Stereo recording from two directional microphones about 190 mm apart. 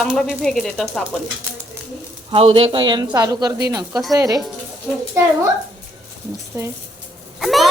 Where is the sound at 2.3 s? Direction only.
30° right (ahead or behind).